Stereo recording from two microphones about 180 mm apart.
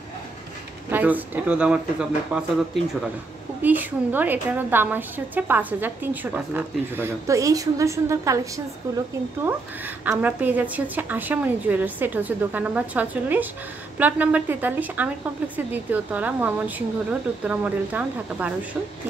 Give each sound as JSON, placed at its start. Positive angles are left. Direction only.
{"t": 0.8, "sound": "a woman's voice", "side_deg": -10}
{"t": 10.0, "sound": "a woman's voice", "side_deg": -10}